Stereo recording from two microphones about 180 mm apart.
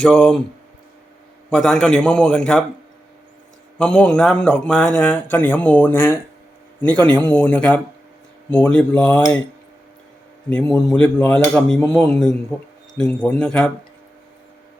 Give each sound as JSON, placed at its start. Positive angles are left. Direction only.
{"t": 0.0, "sound": "speech", "side_deg": 5}
{"t": 1.5, "sound": "speech", "side_deg": 5}
{"t": 3.8, "sound": "speech", "side_deg": 5}
{"t": 10.5, "sound": "speech", "side_deg": 5}